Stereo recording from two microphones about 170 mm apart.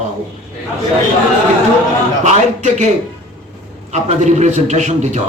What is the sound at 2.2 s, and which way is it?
Speech, 45° right (ahead or behind).